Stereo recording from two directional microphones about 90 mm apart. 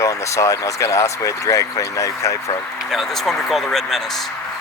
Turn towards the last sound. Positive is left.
turn(degrees=5)  # may be behind; listen again after turning